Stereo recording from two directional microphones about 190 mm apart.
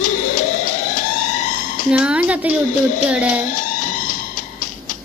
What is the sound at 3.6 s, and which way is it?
Music, 40° left (ahead or behind).